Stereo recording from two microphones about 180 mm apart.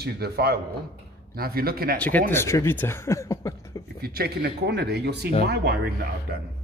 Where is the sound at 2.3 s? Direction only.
15° left (ahead or behind).